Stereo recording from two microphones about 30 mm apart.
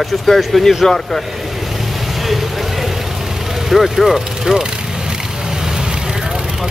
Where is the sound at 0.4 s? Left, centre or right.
Centre.